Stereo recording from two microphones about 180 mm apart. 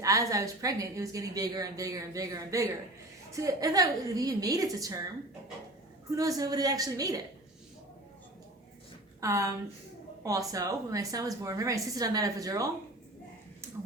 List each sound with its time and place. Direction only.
0.0 s a woman's voice: 20° right (ahead or behind)
6.1 s a woman's voice: 20° right (ahead or behind)
9.2 s a woman's voice: 15° right (ahead or behind)